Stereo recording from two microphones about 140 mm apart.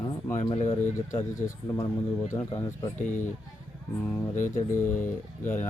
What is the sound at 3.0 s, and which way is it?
Speech, 65° left (ahead or behind).